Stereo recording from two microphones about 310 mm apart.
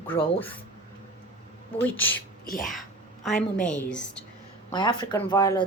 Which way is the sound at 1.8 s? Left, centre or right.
Centre.